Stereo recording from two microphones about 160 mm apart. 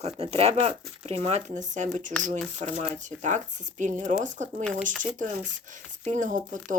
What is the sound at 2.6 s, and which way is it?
Speech, 50° right (ahead or behind).